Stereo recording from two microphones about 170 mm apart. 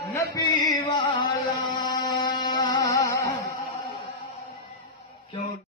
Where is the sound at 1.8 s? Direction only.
25° left (ahead or behind).